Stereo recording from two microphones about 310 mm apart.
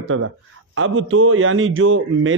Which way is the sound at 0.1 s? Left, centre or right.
Right.